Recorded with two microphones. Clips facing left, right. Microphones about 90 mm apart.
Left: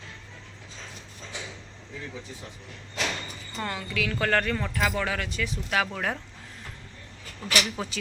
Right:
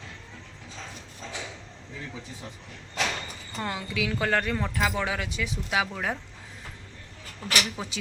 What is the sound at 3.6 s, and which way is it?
Speech, 15° right (ahead or behind).